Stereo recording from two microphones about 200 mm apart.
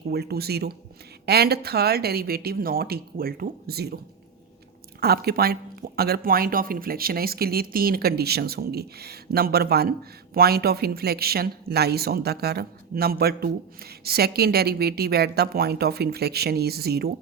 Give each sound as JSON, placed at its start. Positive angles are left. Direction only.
{"t": 0.1, "sound": "speech", "side_deg": -50}